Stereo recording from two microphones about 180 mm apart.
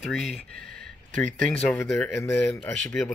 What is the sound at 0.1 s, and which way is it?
Speech, centre (ahead or behind).